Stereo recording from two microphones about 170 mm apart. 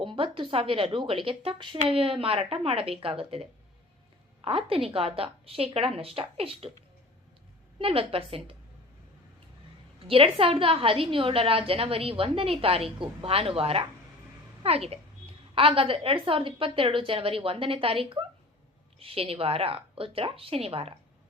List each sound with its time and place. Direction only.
0.0 s a woman's voice: 30° right (ahead or behind)
7.8 s a woman's voice: 35° right (ahead or behind)
10.0 s a woman's voice: 35° right (ahead or behind)